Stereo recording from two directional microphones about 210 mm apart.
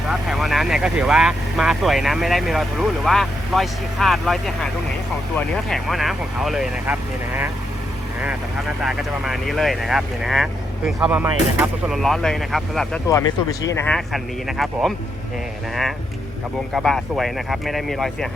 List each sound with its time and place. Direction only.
0.1 s speech: centre (ahead or behind)
12.0 s speech: centre (ahead or behind)
13.1 s speech: 15° left (ahead or behind)